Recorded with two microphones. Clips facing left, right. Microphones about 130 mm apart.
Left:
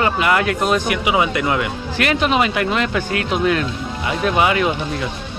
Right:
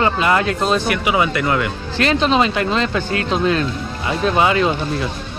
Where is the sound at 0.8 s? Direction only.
15° left (ahead or behind).